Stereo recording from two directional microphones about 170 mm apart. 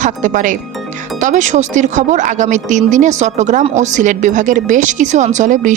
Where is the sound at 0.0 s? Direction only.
45° right (ahead or behind).